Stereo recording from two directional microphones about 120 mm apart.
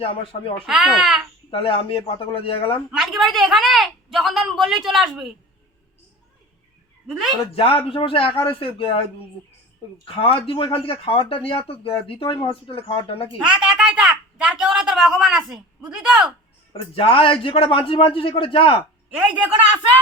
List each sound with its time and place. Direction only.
0.0 s speech: 50° left (ahead or behind)
0.6 s a child's voice: 5° right (ahead or behind)
1.5 s speech: 50° left (ahead or behind)
2.9 s a woman's voice: 5° right (ahead or behind)
7.1 s a child's voice: 5° right (ahead or behind)
7.5 s speech: 50° left (ahead or behind)
10.2 s speech: 50° left (ahead or behind)
13.6 s a sound: 5° right (ahead or behind)
15.9 s a man's voice: 5° right (ahead or behind)
16.7 s speech: 50° left (ahead or behind)
19.1 s a man's voice: 10° right (ahead or behind)